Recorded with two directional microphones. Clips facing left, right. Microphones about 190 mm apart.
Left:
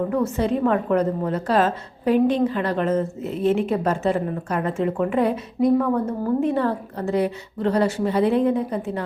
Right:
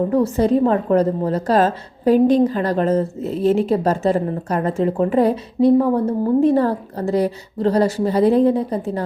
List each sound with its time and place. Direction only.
0.1 s a woman's voice: 35° right (ahead or behind)